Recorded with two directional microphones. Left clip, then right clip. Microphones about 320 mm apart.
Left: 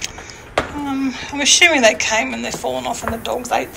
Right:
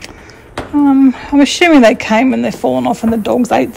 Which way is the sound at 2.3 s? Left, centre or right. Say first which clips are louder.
Right 8 dB; right.